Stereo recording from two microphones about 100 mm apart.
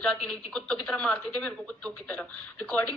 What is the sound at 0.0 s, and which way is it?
Speech, 10° left (ahead or behind).